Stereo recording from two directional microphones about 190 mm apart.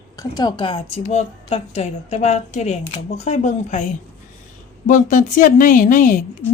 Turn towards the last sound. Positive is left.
turn(degrees=45)  # may be behind; listen again after turning